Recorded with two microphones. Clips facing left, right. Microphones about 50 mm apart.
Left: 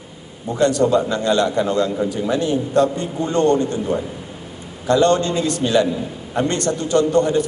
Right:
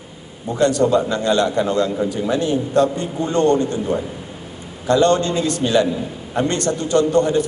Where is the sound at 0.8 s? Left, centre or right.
Centre.